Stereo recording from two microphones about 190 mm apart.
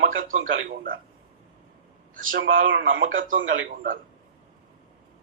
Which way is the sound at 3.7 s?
45° right (ahead or behind).